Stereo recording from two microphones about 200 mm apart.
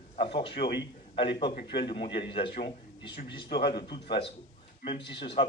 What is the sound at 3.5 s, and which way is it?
Speech, 50° left (ahead or behind).